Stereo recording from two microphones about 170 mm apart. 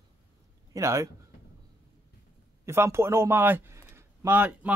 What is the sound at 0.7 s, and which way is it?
Speech, 20° right (ahead or behind).